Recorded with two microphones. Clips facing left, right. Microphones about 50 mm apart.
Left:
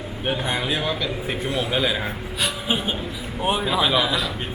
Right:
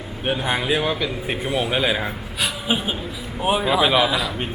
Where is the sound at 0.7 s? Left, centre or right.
Centre.